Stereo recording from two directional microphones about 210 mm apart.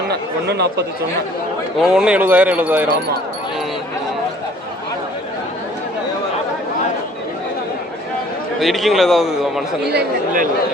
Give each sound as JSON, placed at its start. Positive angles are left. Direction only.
{"t": 0.1, "sound": "speech", "side_deg": -50}
{"t": 1.8, "sound": "speech", "side_deg": -5}
{"t": 8.5, "sound": "a man's voice", "side_deg": 0}
{"t": 9.9, "sound": "speech", "side_deg": -40}